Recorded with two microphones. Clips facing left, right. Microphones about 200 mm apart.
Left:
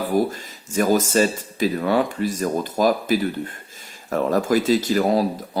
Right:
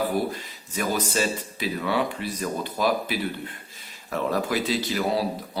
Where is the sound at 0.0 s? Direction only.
45° left (ahead or behind).